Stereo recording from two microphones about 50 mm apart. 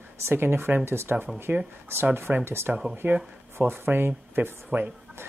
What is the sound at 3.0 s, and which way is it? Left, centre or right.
Speech, right.